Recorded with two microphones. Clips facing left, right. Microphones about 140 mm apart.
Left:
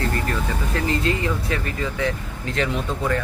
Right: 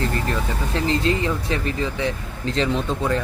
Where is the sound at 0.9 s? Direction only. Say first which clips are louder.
Right 2 dB; 25° right (ahead or behind).